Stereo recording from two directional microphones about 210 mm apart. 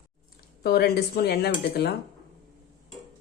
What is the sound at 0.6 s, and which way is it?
Speech, 50° left (ahead or behind).